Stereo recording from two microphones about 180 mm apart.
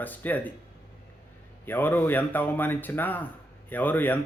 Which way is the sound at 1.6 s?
10° left (ahead or behind).